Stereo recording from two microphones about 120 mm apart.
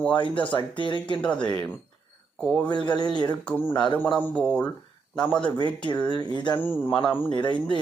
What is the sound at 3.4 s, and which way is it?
A man's voice, 15° left (ahead or behind).